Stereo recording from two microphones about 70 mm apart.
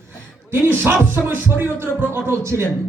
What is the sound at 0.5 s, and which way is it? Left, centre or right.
Speech, right.